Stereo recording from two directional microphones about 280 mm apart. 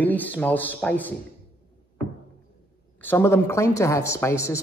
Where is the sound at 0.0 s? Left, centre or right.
Centre.